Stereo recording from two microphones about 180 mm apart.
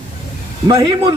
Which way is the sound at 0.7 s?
25° right (ahead or behind).